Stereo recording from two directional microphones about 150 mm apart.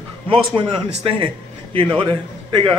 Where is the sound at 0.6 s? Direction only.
35° right (ahead or behind).